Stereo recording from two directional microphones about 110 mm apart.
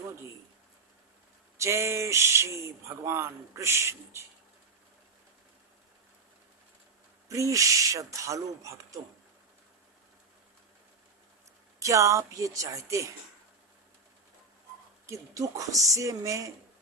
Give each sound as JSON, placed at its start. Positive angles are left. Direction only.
{"t": 1.5, "sound": "speech", "side_deg": -25}
{"t": 7.3, "sound": "speech", "side_deg": -30}
{"t": 11.8, "sound": "speech", "side_deg": -30}
{"t": 15.0, "sound": "speech", "side_deg": -30}